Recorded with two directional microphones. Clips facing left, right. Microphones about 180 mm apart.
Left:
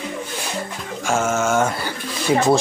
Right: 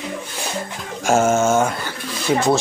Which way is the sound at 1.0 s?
40° right (ahead or behind).